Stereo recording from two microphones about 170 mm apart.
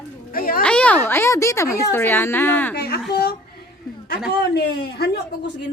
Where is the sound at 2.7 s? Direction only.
70° left (ahead or behind).